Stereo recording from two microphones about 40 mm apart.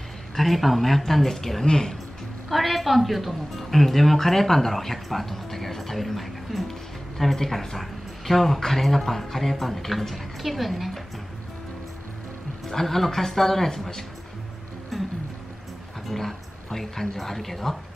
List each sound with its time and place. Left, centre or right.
0.4 s a woman's voice: centre
2.5 s a woman's voice: centre
12.6 s a man's voice: centre
14.9 s music: centre
16.1 s speech: centre